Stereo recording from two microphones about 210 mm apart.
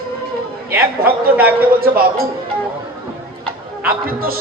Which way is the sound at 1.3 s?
10° right (ahead or behind).